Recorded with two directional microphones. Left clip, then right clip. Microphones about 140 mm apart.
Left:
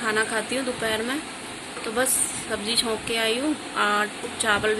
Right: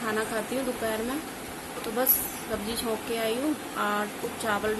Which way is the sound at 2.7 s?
10° left (ahead or behind).